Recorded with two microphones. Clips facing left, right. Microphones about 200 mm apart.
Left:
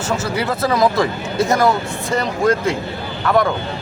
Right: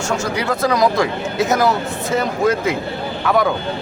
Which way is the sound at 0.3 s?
5° left (ahead or behind).